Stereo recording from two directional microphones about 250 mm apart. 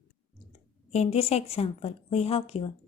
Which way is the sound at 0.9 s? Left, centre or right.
Left.